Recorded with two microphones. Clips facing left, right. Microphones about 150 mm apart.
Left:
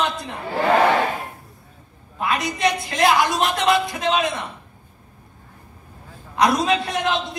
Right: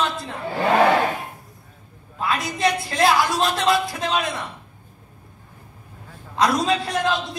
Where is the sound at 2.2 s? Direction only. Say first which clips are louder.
Left 1 dB; 20° left (ahead or behind).